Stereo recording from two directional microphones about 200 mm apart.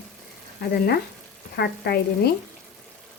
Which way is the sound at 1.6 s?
50° left (ahead or behind).